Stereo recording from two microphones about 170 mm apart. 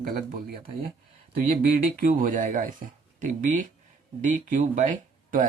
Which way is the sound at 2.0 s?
55° right (ahead or behind).